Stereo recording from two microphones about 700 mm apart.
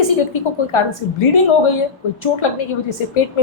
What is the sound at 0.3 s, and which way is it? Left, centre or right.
A woman's voice, left.